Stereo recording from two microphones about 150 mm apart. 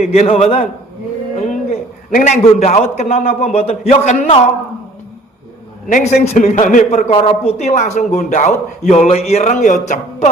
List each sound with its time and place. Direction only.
0.0 s a man's voice: 45° left (ahead or behind)
5.9 s speech: 50° left (ahead or behind)